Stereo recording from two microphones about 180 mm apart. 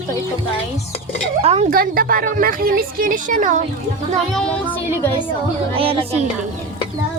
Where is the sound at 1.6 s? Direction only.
55° right (ahead or behind).